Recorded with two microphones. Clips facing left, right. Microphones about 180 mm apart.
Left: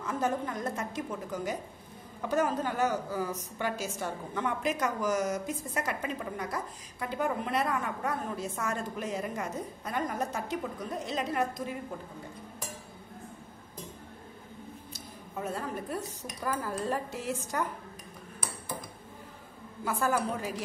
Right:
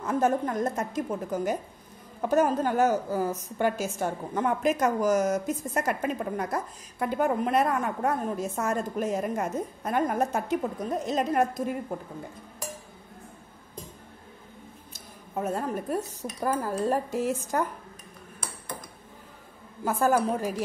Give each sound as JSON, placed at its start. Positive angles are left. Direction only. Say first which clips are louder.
{"t": 0.0, "sound": "a woman's voice", "louder": "right 6 dB", "side_deg": -45}
{"t": 14.9, "sound": "a sound", "louder": "left 2 dB", "side_deg": -50}
{"t": 16.5, "sound": "a woman's voice", "louder": "right 5 dB", "side_deg": -45}
{"t": 19.8, "sound": "a woman's voice", "louder": "right 6 dB", "side_deg": -45}